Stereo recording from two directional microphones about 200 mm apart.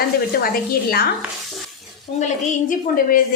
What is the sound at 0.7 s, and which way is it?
Speech, 50° left (ahead or behind).